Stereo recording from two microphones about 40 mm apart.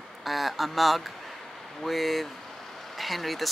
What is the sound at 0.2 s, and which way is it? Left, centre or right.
Speech, centre.